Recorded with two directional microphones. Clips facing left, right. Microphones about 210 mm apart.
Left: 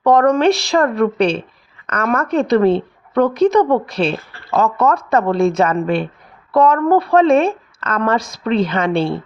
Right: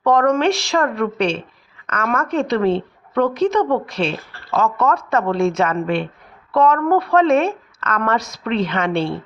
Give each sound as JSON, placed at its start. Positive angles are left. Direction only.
{"t": 0.0, "sound": "speech", "side_deg": 35}